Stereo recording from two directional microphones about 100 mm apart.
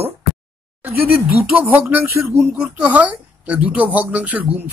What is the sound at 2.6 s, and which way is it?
Speech, 10° right (ahead or behind).